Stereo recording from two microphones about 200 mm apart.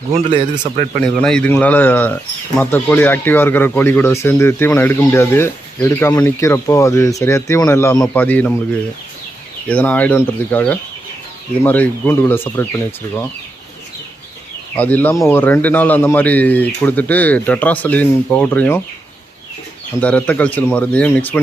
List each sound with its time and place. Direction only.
0.1 s speech: 25° right (ahead or behind)
1.0 s speech: 5° left (ahead or behind)
9.6 s speech: 5° left (ahead or behind)
14.8 s speech: 10° left (ahead or behind)
20.0 s speech: 5° left (ahead or behind)